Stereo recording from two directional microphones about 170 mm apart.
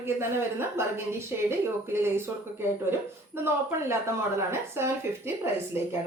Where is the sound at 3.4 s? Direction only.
15° right (ahead or behind).